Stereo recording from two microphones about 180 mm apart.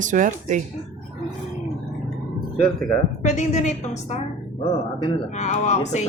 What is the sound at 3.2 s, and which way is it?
Speech, 40° left (ahead or behind).